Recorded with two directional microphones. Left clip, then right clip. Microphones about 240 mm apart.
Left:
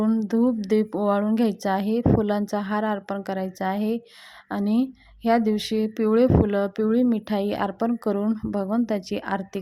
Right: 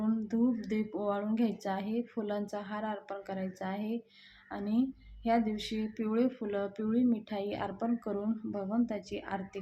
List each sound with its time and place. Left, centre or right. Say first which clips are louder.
0.0 s speech: left 10 dB; left